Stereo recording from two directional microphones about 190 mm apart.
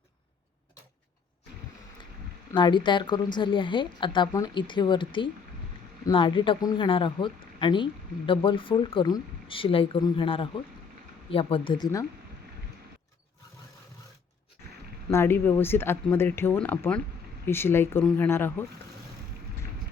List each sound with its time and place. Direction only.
2.5 s speech: 25° left (ahead or behind)
15.1 s speech: 10° left (ahead or behind)